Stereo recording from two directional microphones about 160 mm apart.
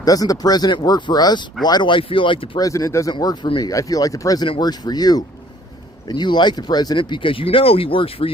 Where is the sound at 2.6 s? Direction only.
20° left (ahead or behind).